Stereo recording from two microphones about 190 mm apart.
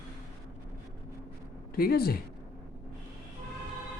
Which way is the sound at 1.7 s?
50° left (ahead or behind).